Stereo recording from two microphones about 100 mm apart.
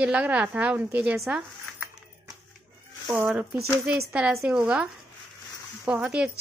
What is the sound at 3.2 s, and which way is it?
Speech, 15° right (ahead or behind).